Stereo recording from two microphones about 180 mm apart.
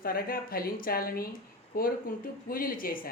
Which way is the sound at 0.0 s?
55° left (ahead or behind).